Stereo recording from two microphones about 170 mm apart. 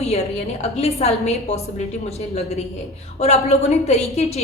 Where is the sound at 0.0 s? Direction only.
40° left (ahead or behind).